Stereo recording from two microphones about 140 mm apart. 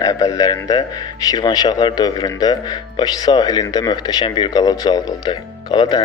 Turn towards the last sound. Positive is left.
turn(degrees=30)  # may be behind; listen again after turning